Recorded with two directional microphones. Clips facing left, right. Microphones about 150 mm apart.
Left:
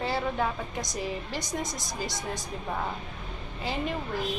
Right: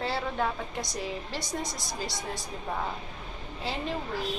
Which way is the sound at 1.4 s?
20° left (ahead or behind).